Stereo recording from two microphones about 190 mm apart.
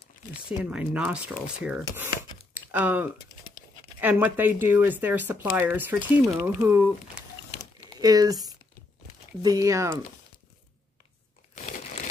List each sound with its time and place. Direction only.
0.3 s speech: 5° right (ahead or behind)
2.5 s a sound: 10° right (ahead or behind)
4.0 s speech: 10° right (ahead or behind)
8.0 s speech: 20° right (ahead or behind)
11.5 s crumpling: 40° left (ahead or behind)